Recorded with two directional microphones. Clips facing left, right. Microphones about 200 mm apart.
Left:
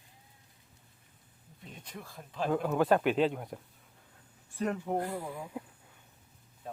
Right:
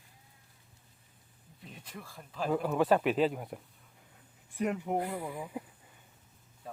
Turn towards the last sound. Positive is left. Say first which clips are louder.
# right 1 dB
turn(degrees=0)  # may be behind; listen again after turning